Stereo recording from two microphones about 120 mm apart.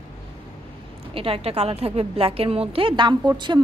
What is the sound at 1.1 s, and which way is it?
A woman's voice, 55° right (ahead or behind).